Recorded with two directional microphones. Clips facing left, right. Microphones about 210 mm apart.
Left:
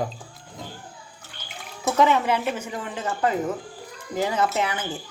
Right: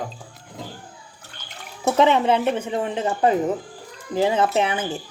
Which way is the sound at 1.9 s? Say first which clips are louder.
Right 3 dB; 20° right (ahead or behind).